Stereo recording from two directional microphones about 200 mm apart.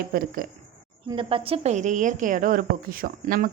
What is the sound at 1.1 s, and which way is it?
A woman's voice, 25° right (ahead or behind).